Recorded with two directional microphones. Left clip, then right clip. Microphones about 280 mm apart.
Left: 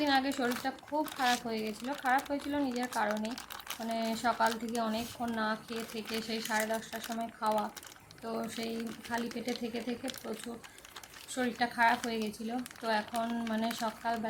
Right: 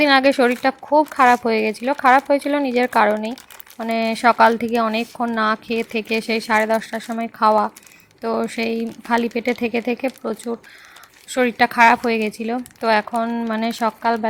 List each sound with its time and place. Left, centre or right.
0.0 s speech: right